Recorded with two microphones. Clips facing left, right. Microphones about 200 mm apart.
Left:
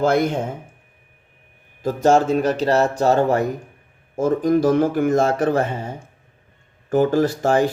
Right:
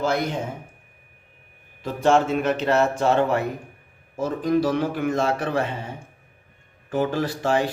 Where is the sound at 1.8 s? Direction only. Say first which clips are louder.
Left 3 dB; 40° left (ahead or behind).